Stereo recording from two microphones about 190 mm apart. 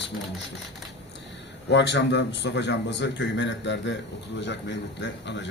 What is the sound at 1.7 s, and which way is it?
A man's voice, 65° left (ahead or behind).